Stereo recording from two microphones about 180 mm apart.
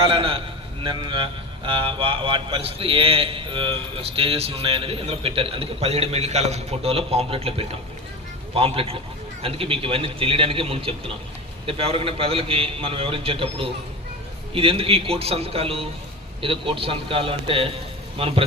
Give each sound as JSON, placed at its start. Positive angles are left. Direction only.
{"t": 0.0, "sound": "a man's voice", "side_deg": -30}